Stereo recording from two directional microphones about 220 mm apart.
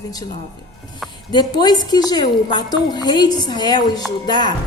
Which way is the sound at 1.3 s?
20° left (ahead or behind).